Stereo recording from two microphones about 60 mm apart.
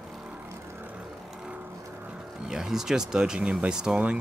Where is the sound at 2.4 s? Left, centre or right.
Centre.